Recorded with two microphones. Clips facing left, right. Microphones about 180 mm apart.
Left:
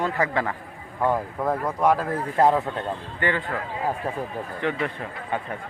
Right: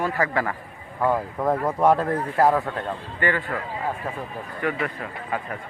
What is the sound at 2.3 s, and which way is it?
A man's voice, 20° left (ahead or behind).